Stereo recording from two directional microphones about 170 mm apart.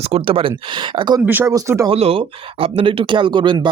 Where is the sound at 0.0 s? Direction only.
35° right (ahead or behind).